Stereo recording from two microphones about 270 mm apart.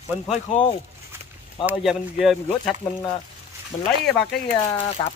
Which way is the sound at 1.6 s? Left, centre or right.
Centre.